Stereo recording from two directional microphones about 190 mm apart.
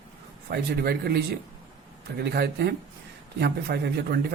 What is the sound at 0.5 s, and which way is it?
Speech, 55° right (ahead or behind).